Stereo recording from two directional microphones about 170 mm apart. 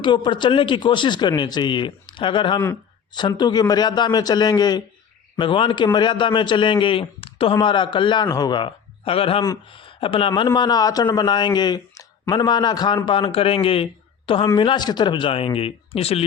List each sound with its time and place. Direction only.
0.0 s a man's voice: 25° left (ahead or behind)